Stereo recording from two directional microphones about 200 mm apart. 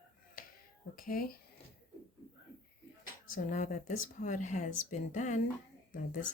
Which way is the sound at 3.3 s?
40° left (ahead or behind).